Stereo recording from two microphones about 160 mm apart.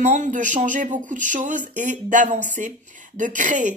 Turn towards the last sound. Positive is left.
turn(degrees=-55)  # may be behind; listen again after turning